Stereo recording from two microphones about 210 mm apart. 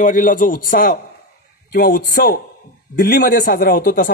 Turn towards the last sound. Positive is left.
turn(degrees=40)  # may be behind; listen again after turning